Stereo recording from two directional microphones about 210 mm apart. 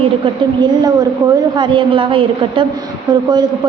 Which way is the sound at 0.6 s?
20° right (ahead or behind).